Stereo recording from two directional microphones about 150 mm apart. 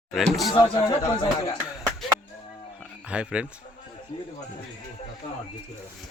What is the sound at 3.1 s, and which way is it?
Speech, 5° right (ahead or behind).